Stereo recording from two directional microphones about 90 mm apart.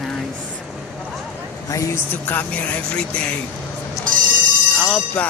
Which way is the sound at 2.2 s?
20° left (ahead or behind).